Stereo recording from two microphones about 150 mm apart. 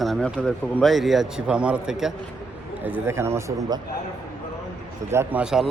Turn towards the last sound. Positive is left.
turn(degrees=-5)  # may be behind; listen again after turning